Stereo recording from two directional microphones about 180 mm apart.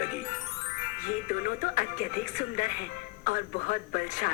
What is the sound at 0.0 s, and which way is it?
Music, 45° left (ahead or behind).